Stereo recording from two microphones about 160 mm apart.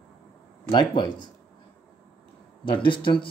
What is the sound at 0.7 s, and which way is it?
Speech, 30° left (ahead or behind).